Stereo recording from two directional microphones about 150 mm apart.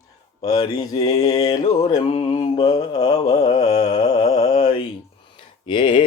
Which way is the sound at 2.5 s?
25° left (ahead or behind).